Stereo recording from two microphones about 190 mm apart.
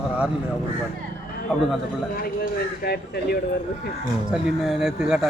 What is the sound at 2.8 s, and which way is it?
Speech, 55° left (ahead or behind).